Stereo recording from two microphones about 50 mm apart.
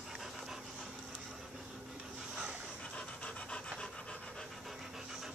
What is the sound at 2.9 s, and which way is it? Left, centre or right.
Pant, left.